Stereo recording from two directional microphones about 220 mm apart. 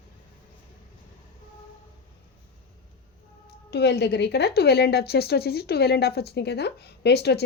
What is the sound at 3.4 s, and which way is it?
A woman's voice, 50° left (ahead or behind).